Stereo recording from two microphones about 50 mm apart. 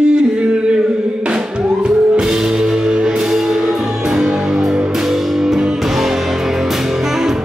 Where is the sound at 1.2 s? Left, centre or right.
Centre.